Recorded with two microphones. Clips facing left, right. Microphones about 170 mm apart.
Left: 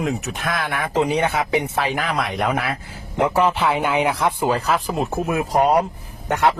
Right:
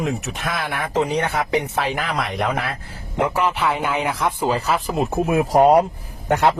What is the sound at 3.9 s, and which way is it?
Speech, 15° left (ahead or behind).